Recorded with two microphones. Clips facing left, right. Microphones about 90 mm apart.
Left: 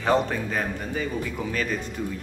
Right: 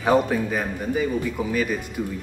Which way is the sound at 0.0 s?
10° right (ahead or behind).